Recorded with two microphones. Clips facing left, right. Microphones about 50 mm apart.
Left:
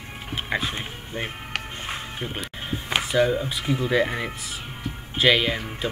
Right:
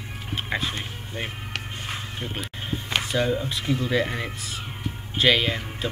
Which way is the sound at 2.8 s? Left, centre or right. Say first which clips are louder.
Left 3 dB; centre.